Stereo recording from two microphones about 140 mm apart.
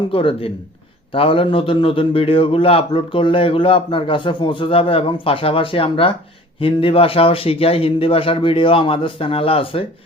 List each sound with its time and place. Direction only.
0.1 s a man's voice: 40° left (ahead or behind)